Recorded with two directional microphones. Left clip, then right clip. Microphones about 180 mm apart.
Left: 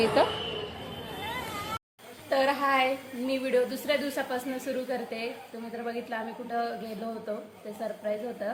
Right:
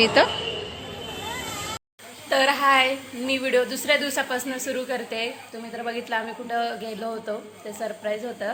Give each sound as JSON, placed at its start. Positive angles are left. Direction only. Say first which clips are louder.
{"t": 0.0, "sound": "a woman's voice", "louder": "right 6 dB", "side_deg": 0}
{"t": 2.3, "sound": "a woman's voice", "louder": "right 6 dB", "side_deg": -5}